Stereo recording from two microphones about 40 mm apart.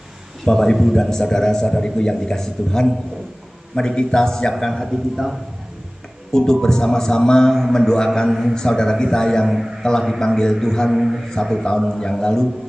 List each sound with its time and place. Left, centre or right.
0.5 s a man's voice: centre
4.8 s a man's voice: centre
6.3 s a man's voice: centre
8.3 s a man's voice: centre
8.5 s a man's voice: centre
10.9 s a man's voice: centre
11.4 s a man's voice: centre